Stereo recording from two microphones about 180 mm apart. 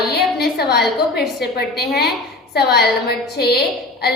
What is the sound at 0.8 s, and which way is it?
Speech, centre (ahead or behind).